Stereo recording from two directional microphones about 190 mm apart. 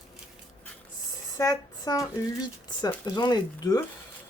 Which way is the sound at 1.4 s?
20° left (ahead or behind).